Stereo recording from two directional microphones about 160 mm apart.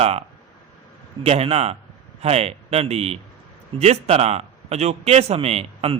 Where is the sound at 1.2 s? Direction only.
40° right (ahead or behind).